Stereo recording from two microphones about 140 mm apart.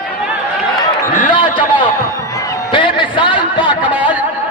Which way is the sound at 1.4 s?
35° left (ahead or behind).